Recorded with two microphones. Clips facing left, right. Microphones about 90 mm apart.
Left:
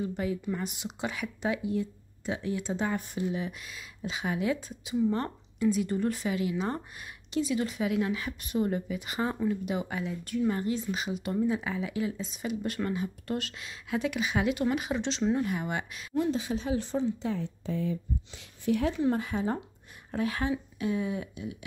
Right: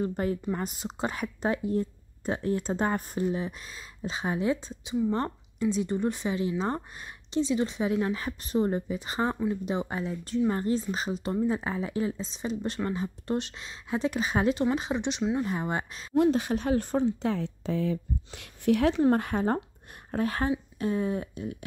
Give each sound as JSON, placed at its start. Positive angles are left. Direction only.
{"t": 0.0, "sound": "speech", "side_deg": -45}
{"t": 15.4, "sound": "speech", "side_deg": -30}
{"t": 16.2, "sound": "speech", "side_deg": -60}
{"t": 19.0, "sound": "speech", "side_deg": -55}